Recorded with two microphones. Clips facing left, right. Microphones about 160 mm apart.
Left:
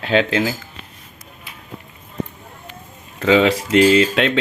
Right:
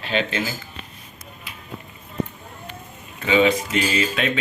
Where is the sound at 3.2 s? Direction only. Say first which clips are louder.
Left 3 dB; 90° left.